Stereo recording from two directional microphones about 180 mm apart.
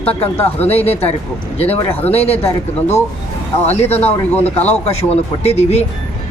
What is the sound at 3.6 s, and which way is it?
Speech, 35° left (ahead or behind).